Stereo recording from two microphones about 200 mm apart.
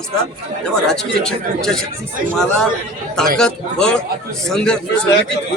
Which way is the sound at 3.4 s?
5° left (ahead or behind).